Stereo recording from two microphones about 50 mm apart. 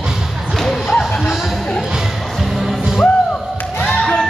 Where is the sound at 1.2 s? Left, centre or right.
Centre.